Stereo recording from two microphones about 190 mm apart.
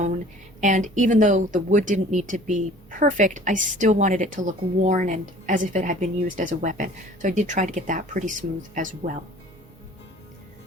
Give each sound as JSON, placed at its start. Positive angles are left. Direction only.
{"t": 0.6, "sound": "a woman's voice", "side_deg": -40}